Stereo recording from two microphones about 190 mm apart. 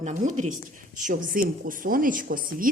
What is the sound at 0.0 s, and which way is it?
A woman's voice, 40° right (ahead or behind).